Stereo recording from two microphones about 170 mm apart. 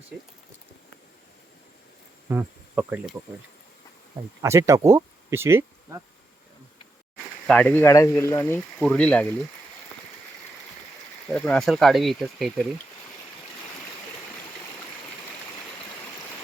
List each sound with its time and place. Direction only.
2.3 s cricket: 10° right (ahead or behind)
4.4 s speech: 15° right (ahead or behind)
7.4 s speech: 10° left (ahead or behind)
11.3 s speech: 5° left (ahead or behind)